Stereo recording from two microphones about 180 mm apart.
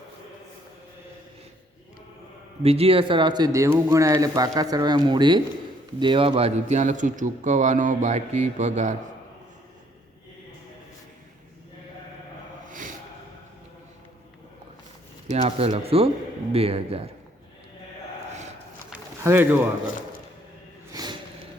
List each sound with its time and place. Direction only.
2.6 s a man's voice: 35° right (ahead or behind)
15.3 s a man's voice: 35° right (ahead or behind)
19.2 s speech: 10° right (ahead or behind)
20.9 s snort: 25° right (ahead or behind)